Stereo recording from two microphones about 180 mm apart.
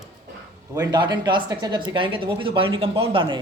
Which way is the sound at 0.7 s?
20° right (ahead or behind).